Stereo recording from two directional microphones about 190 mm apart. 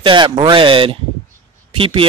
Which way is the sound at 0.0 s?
25° right (ahead or behind).